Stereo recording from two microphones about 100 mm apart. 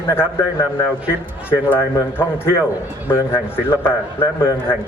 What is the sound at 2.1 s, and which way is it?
A man's voice, 25° left (ahead or behind).